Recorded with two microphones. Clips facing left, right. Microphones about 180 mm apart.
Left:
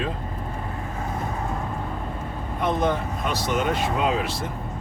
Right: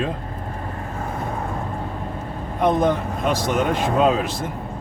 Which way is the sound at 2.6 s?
45° right (ahead or behind).